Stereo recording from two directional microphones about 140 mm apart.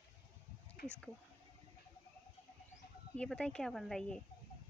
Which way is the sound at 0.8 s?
90° left.